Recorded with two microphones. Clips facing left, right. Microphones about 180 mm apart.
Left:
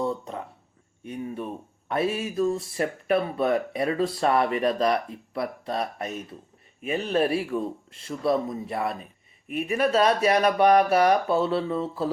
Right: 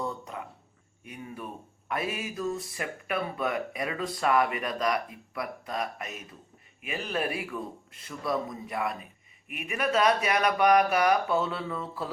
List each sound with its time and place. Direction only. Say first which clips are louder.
1.0 s speech: left 8 dB; 25° left (ahead or behind)